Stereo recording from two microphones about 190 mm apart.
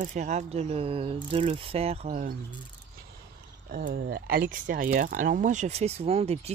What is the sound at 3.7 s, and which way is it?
Speech, 50° right (ahead or behind).